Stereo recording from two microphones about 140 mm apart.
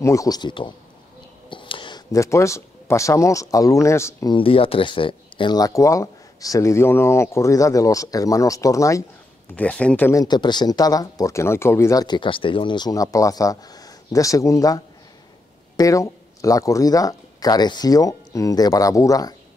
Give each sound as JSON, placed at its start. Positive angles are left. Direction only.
{"t": 0.0, "sound": "speech", "side_deg": 25}
{"t": 1.5, "sound": "whispering", "side_deg": 35}
{"t": 2.1, "sound": "speech", "side_deg": 20}
{"t": 4.3, "sound": "speech", "side_deg": 40}
{"t": 9.6, "sound": "speech", "side_deg": 10}
{"t": 10.1, "sound": "speech", "side_deg": 30}